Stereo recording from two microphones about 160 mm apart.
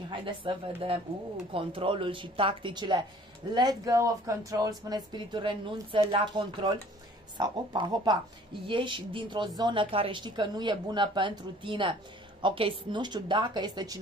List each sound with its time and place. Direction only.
0.1 s speech: 30° right (ahead or behind)